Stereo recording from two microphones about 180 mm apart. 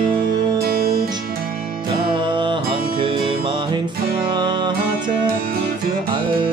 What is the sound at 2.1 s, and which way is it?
Music, 25° right (ahead or behind).